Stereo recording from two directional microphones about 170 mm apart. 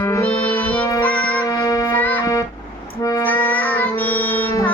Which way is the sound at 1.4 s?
20° left (ahead or behind).